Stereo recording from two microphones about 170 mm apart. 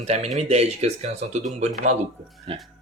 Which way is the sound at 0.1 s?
40° right (ahead or behind).